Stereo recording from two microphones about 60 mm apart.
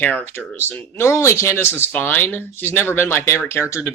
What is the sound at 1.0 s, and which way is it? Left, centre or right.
Speech, left.